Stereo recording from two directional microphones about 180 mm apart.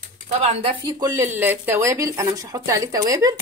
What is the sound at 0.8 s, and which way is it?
Speech, 20° right (ahead or behind).